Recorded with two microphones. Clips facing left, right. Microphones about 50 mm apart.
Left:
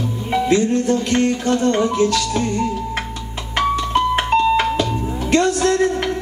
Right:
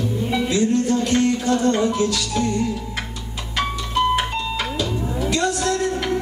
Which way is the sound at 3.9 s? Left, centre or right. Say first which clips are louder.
Left 3 dB; left.